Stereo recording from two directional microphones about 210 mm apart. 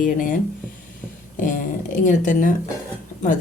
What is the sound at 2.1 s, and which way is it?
Speech, 35° left (ahead or behind).